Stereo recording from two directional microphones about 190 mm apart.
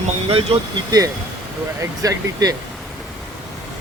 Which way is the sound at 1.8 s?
20° right (ahead or behind).